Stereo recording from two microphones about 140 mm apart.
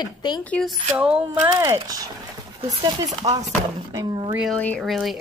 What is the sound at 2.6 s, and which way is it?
Speech, 40° right (ahead or behind).